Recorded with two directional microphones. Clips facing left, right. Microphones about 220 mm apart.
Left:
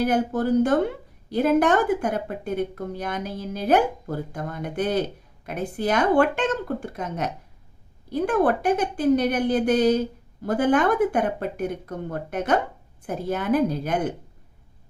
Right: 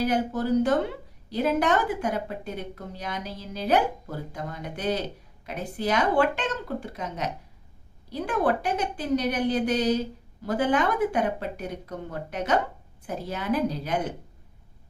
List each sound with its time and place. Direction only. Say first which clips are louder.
0.0 s a woman's voice: left 3 dB; 50° left (ahead or behind)